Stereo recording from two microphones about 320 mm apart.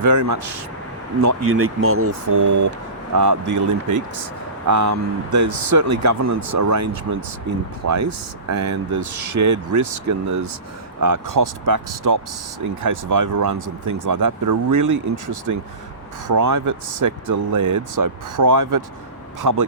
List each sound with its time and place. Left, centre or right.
0.0 s speech: right
1.5 s speech: right
2.2 s speech: right
11.0 s speech: right